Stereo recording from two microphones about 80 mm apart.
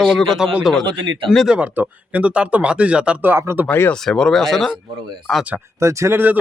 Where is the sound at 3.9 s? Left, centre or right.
Centre.